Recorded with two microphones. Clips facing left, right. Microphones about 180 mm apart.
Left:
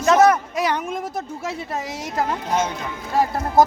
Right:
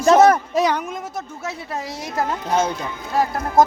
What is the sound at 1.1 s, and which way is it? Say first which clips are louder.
Speech: left 2 dB; 10° left (ahead or behind).